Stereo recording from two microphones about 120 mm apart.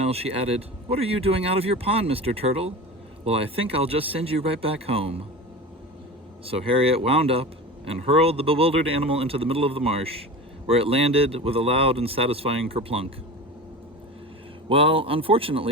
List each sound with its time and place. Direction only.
0.0 s speech: 55° right (ahead or behind)
6.4 s speech: 55° right (ahead or behind)
14.7 s speech: 50° right (ahead or behind)